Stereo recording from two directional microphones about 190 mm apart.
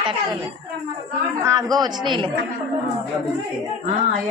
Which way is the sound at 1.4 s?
20° right (ahead or behind).